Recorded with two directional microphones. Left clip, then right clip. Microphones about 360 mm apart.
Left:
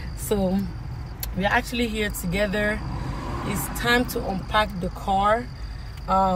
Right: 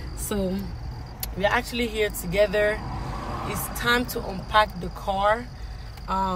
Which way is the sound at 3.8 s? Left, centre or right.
Centre.